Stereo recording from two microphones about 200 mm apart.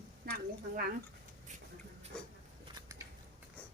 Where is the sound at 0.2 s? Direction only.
45° right (ahead or behind).